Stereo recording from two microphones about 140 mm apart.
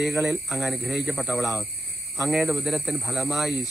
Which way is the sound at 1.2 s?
15° left (ahead or behind).